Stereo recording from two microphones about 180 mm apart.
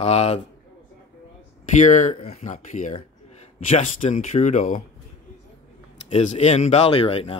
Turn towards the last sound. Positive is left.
turn(degrees=30)  # may be behind; listen again after turning